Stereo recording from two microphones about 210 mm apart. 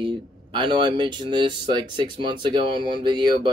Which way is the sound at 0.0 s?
25° right (ahead or behind).